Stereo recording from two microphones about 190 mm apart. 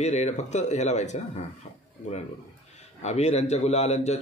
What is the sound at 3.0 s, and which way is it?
Speech, 35° left (ahead or behind).